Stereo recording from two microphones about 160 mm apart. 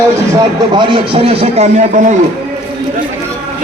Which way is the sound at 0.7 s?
35° right (ahead or behind).